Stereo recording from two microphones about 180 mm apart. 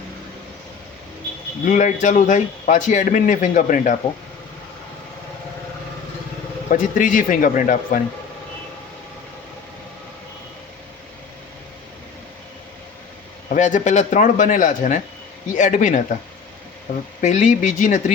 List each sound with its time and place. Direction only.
1.6 s speech: 45° left (ahead or behind)
6.7 s speech: 45° left (ahead or behind)
13.5 s speech: 45° left (ahead or behind)
17.2 s speech: 40° left (ahead or behind)